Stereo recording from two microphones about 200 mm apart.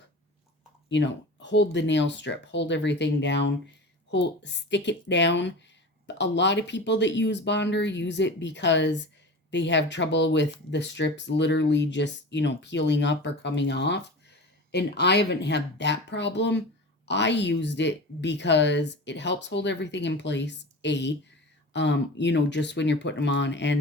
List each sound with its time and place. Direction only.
0.9 s a woman's voice: 60° left (ahead or behind)